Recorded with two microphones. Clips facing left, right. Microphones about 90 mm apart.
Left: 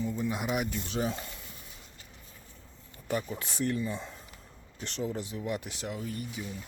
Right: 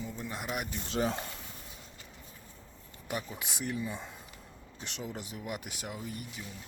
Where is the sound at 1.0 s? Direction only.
55° right (ahead or behind).